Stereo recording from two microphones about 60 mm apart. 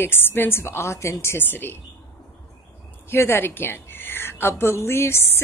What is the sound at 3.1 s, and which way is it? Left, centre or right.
A woman's voice, left.